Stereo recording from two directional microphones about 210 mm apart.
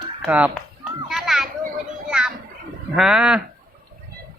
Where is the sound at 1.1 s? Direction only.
Centre (ahead or behind).